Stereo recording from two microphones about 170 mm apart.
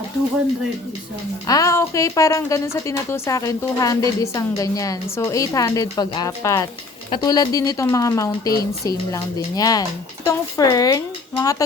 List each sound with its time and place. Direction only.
1.5 s a woman's voice: 20° left (ahead or behind)